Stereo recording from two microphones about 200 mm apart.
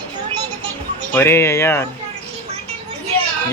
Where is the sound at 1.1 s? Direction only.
10° left (ahead or behind).